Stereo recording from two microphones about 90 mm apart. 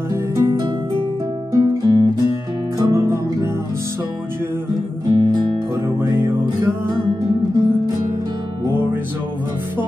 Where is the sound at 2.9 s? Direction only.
30° right (ahead or behind).